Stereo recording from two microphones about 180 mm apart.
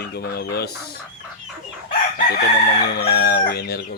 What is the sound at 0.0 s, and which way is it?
Chicken, 65° left (ahead or behind).